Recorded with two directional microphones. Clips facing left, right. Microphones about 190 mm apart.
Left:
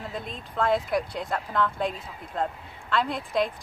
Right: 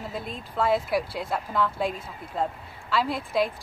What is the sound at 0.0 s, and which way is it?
Speech, 5° right (ahead or behind).